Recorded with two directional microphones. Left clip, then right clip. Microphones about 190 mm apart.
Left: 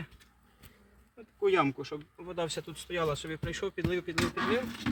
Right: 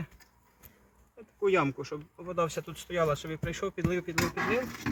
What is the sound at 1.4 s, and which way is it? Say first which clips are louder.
Speech: even; 5° left (ahead or behind).